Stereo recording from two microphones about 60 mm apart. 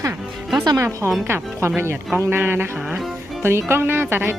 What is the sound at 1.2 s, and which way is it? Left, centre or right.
Speech, right.